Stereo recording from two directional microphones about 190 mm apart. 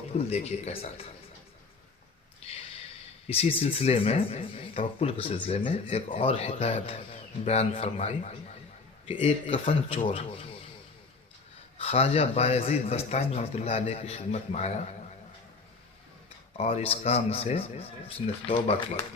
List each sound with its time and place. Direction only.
0.3 s speech: 35° left (ahead or behind)
3.2 s speech: 30° left (ahead or behind)
11.8 s speech: 35° left (ahead or behind)
16.6 s speech: 30° left (ahead or behind)